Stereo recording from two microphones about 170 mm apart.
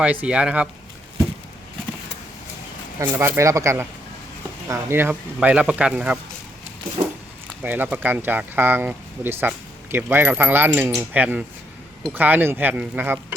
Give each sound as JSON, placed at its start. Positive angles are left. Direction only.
{"t": 0.0, "sound": "speech", "side_deg": -10}
{"t": 3.0, "sound": "speech", "side_deg": -15}
{"t": 7.6, "sound": "speech", "side_deg": -10}